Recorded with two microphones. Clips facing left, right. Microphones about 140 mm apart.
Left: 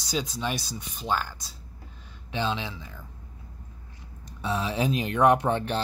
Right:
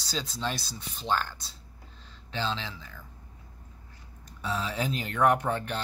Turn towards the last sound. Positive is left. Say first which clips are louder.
# left 4 dB
turn(degrees=20)  # may be behind; listen again after turning